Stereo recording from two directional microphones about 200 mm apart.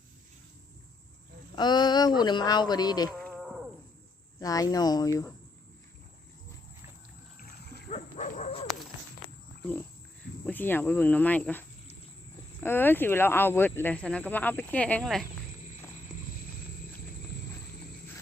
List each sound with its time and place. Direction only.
1.5 s speech: 20° left (ahead or behind)
3.2 s a sound: centre (ahead or behind)
4.4 s speech: 20° left (ahead or behind)
7.3 s splash: 55° left (ahead or behind)
7.9 s dog: 35° left (ahead or behind)
10.4 s speech: 10° left (ahead or behind)